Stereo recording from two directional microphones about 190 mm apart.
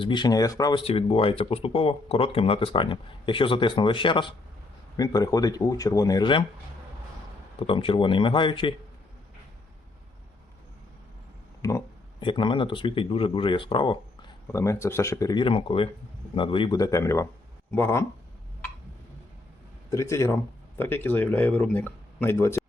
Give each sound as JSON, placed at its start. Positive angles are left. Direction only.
{"t": 0.0, "sound": "speech", "side_deg": 25}
{"t": 0.9, "sound": "speech", "side_deg": 30}
{"t": 7.7, "sound": "speech", "side_deg": 30}
{"t": 11.6, "sound": "speech", "side_deg": 15}
{"t": 12.2, "sound": "speech", "side_deg": 25}
{"t": 14.4, "sound": "speech", "side_deg": 15}
{"t": 19.9, "sound": "speech", "side_deg": 15}